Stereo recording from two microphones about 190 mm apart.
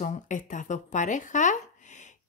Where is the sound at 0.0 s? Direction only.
40° left (ahead or behind).